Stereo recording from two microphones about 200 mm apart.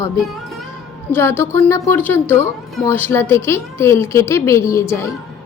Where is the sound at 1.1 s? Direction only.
10° left (ahead or behind).